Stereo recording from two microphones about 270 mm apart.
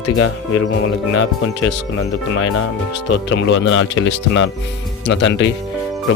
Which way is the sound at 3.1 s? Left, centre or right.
Left.